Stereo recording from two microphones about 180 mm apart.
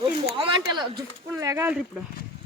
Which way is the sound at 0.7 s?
20° right (ahead or behind).